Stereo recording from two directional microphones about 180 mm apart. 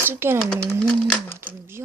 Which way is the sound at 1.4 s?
15° right (ahead or behind).